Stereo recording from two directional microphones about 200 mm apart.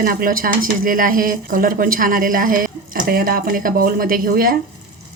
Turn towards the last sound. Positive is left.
turn(degrees=-45)  # may be behind; listen again after turning